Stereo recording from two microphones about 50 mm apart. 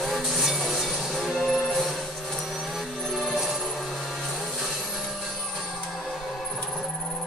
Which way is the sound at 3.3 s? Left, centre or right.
Centre.